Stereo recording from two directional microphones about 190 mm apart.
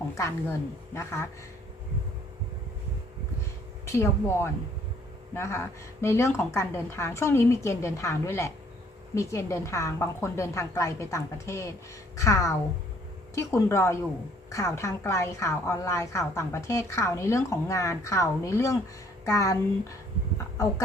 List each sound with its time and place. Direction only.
0.2 s a woman's voice: 15° left (ahead or behind)
3.8 s a woman's voice: 15° left (ahead or behind)